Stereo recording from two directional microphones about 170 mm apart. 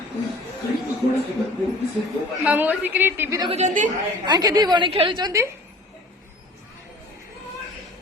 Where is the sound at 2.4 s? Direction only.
10° right (ahead or behind).